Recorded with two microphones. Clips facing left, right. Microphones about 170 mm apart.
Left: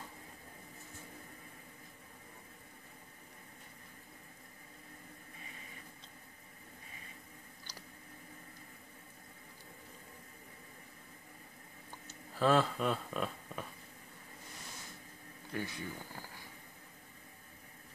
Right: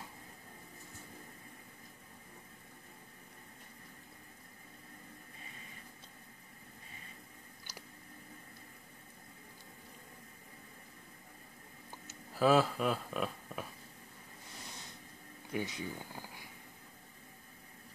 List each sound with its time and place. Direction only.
12.4 s speech: 5° right (ahead or behind)
15.5 s speech: 15° right (ahead or behind)